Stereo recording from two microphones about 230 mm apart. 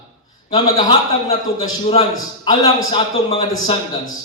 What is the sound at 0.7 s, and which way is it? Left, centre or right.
A man's voice, left.